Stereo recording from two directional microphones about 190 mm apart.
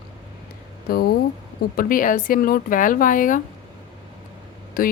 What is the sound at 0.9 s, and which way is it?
A woman's voice, 50° left (ahead or behind).